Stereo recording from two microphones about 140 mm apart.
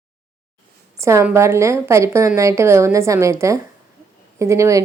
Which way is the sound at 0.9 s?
20° right (ahead or behind).